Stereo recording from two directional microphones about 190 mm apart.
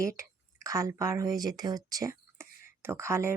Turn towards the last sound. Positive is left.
turn(degrees=-15)  # may be behind; listen again after turning